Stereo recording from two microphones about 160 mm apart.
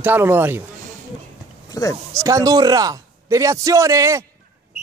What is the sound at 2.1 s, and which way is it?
A man's voice, 20° right (ahead or behind).